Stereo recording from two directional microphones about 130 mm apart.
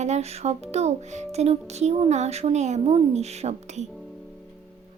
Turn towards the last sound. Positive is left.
turn(degrees=-55)  # may be behind; listen again after turning